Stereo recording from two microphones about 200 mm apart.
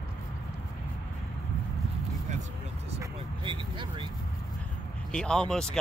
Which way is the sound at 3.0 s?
25° right (ahead or behind).